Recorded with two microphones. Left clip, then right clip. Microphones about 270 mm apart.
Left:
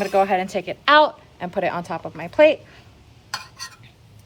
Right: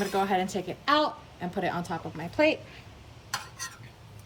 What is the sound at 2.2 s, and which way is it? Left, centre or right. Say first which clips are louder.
Cutlery: left 10 dB; left.